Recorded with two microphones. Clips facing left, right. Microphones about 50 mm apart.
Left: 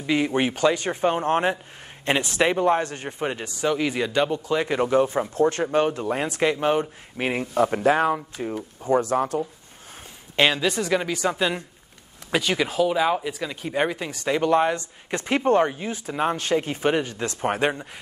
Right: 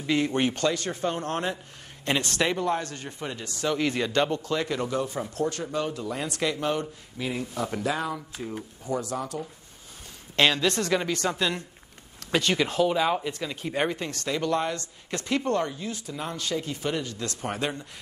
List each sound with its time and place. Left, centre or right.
0.0 s speech: centre; by 3.4 s left
3.4 s speech: centre
4.6 s speech: left
6.4 s speech: left
7.2 s speech: left
10.3 s speech: centre
14.3 s speech: left
16.1 s speech: left